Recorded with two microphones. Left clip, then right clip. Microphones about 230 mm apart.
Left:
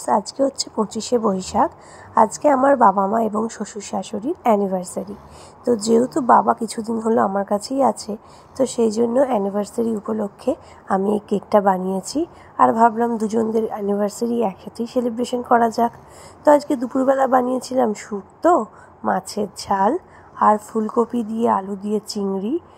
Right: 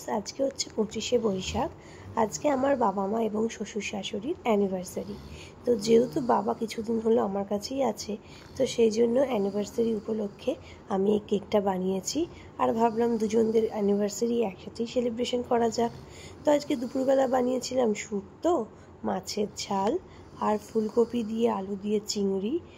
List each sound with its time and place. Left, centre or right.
0.1 s a woman's voice: left